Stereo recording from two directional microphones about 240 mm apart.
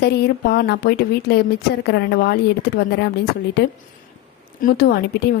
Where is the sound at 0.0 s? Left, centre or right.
Left.